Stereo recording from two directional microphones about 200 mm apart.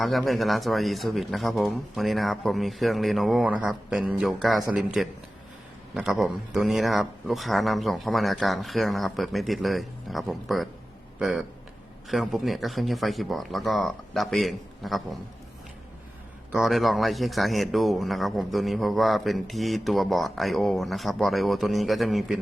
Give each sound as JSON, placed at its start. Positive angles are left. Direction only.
{"t": 0.0, "sound": "speech", "side_deg": 0}
{"t": 5.9, "sound": "speech", "side_deg": 0}
{"t": 16.5, "sound": "speech", "side_deg": 0}